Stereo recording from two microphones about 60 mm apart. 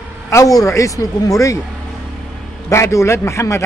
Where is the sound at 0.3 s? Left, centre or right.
Left.